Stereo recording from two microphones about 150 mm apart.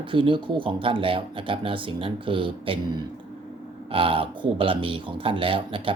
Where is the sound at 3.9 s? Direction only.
35° right (ahead or behind).